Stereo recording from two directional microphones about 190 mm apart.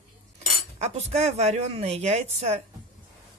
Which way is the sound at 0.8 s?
35° right (ahead or behind).